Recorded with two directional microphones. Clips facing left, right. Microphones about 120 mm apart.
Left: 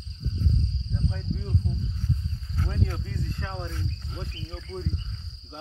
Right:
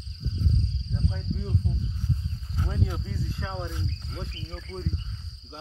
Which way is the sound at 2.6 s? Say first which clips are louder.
Even; 10° right (ahead or behind).